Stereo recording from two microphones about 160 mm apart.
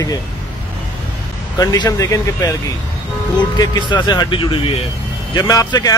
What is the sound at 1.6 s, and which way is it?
Speech, 20° left (ahead or behind).